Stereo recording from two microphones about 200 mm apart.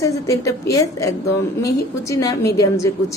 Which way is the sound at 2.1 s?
15° left (ahead or behind).